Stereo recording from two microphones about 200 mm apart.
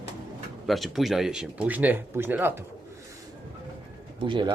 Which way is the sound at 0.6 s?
Centre (ahead or behind).